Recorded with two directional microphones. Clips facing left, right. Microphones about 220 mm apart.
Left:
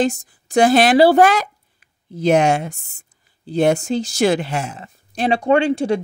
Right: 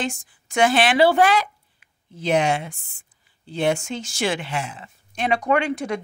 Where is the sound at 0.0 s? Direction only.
40° left (ahead or behind).